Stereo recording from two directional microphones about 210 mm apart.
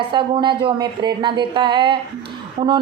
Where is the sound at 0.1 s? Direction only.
25° right (ahead or behind).